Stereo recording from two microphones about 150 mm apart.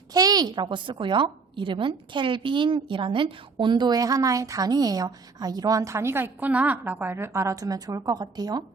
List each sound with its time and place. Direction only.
0.1 s a woman's voice: 25° right (ahead or behind)